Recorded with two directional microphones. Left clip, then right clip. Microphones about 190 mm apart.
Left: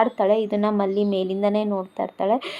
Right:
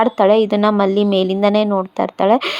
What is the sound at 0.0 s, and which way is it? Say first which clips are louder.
Speech: right 7 dB; 25° right (ahead or behind).